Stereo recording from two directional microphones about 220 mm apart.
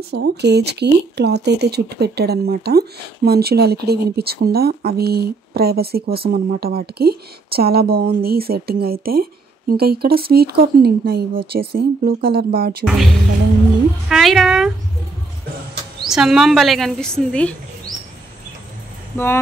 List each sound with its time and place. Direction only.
0.1 s speech: 50° right (ahead or behind)
12.8 s a woman's voice: centre (ahead or behind)
16.1 s a woman's voice: centre (ahead or behind)
19.1 s speech: 10° left (ahead or behind)